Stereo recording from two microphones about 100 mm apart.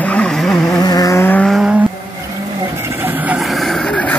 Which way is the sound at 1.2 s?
15° left (ahead or behind).